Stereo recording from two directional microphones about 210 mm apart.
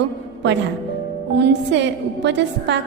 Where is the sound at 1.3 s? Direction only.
55° right (ahead or behind).